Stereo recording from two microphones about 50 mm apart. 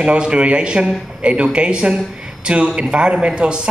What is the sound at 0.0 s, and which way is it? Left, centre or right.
A man's voice, right.